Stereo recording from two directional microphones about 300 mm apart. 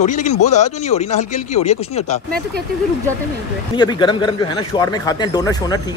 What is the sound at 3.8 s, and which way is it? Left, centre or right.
Speech, centre.